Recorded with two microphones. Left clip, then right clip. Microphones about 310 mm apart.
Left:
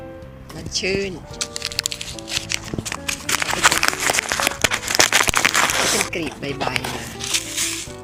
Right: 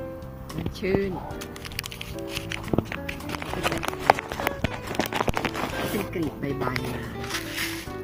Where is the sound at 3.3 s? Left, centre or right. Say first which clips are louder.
Left 12 dB; left.